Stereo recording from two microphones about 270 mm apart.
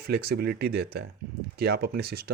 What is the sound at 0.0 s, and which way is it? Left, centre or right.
Speech, right.